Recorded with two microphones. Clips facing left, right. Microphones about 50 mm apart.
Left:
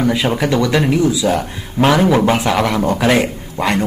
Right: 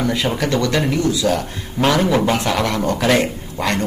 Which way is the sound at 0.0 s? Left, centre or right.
Centre.